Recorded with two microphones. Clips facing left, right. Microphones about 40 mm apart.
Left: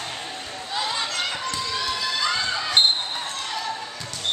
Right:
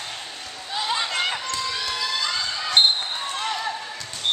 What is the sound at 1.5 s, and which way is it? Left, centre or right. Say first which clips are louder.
Basketball bounce: even; centre.